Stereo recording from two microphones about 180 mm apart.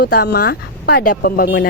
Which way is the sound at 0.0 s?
60° left (ahead or behind).